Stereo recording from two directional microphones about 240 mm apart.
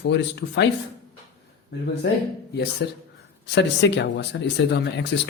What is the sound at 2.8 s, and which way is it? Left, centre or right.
Speech, left.